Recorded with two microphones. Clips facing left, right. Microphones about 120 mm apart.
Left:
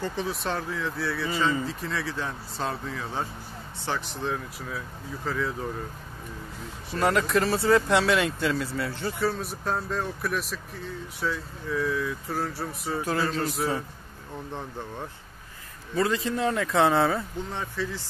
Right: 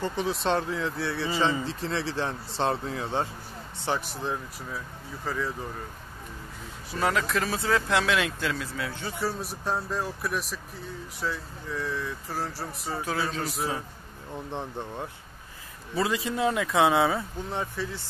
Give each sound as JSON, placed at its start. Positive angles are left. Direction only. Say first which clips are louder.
{"t": 0.0, "sound": "speech", "louder": "right 1 dB", "side_deg": -15}
{"t": 0.3, "sound": "speech", "louder": "right 4 dB", "side_deg": -30}
{"t": 3.8, "sound": "speech", "louder": "right 1 dB", "side_deg": -15}
{"t": 6.9, "sound": "speech", "louder": "left 3 dB", "side_deg": 0}
{"t": 14.5, "sound": "speech", "louder": "right 2 dB", "side_deg": -20}